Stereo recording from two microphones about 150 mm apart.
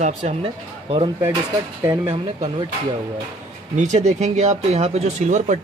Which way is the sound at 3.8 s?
50° right (ahead or behind).